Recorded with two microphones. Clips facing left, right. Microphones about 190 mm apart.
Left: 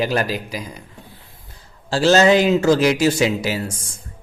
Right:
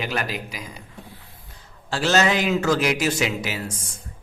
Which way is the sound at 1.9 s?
30° left (ahead or behind).